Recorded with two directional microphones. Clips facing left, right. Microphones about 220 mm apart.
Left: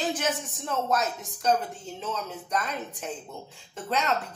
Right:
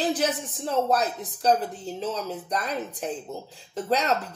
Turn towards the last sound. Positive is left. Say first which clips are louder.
# right 4 dB
turn(degrees=-35)  # may be behind; listen again after turning